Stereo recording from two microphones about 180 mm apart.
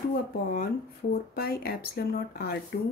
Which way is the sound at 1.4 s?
60° left (ahead or behind).